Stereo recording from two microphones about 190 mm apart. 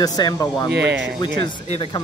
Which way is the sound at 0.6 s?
65° right (ahead or behind).